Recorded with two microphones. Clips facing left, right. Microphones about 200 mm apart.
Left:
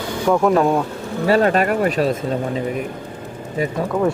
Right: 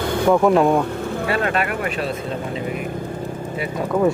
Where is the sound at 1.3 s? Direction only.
40° left (ahead or behind).